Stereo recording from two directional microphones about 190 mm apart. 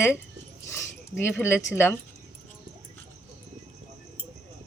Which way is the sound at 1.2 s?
10° left (ahead or behind).